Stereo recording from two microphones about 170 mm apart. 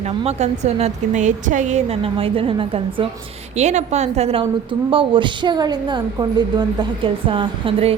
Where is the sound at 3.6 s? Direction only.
40° right (ahead or behind).